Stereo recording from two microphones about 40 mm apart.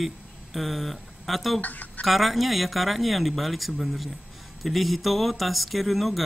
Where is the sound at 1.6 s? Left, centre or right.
Left.